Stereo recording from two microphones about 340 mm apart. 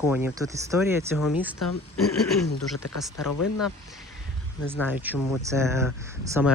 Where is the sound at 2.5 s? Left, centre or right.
Left.